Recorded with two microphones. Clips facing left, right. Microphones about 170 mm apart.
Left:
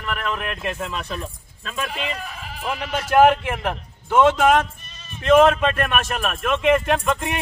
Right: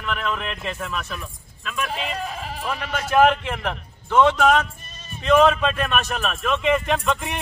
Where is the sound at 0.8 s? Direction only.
25° left (ahead or behind).